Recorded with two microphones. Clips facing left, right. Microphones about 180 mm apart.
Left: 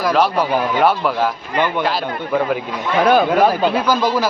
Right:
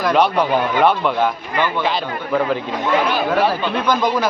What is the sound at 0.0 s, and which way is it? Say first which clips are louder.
Speech: even; centre (ahead or behind).